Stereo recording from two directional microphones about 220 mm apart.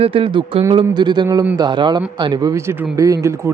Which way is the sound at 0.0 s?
25° right (ahead or behind).